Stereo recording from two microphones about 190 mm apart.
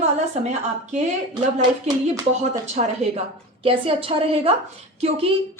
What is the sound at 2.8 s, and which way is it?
Speech, 40° right (ahead or behind).